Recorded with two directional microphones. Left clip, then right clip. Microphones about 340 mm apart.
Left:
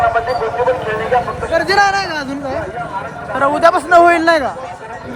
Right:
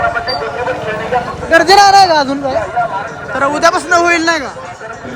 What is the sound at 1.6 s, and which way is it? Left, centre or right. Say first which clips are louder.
Speech: right 8 dB; centre.